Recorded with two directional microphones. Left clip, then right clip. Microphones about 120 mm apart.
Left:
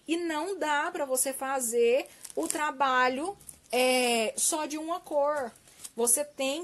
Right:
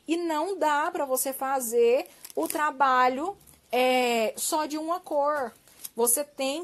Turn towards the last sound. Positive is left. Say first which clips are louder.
# right 1 dB
turn(degrees=-30)  # may be behind; listen again after turning